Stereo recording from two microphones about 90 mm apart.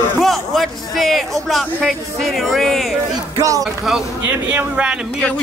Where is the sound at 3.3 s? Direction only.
40° right (ahead or behind).